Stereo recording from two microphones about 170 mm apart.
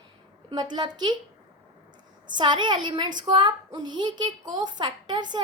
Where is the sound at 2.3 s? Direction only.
25° right (ahead or behind).